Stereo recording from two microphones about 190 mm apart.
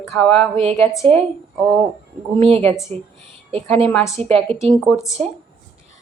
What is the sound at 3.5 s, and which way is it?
Speech, 30° right (ahead or behind).